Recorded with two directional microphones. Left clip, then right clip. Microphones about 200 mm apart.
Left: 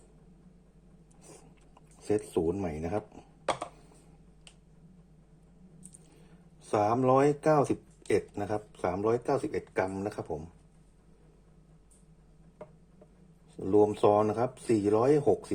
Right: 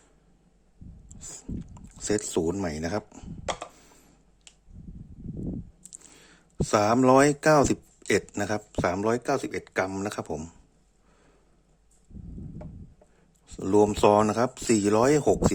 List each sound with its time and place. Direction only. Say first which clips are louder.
2.0 s speech: right 3 dB; 25° right (ahead or behind)
6.7 s speech: right 5 dB; 35° right (ahead or behind)
13.6 s speech: right 3 dB; 35° right (ahead or behind)